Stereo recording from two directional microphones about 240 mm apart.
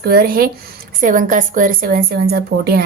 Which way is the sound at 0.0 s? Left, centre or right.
Right.